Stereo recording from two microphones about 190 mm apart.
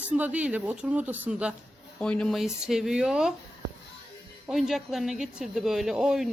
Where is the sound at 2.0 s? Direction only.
5° left (ahead or behind).